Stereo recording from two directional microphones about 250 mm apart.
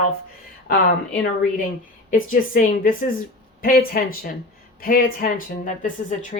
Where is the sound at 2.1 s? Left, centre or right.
Left.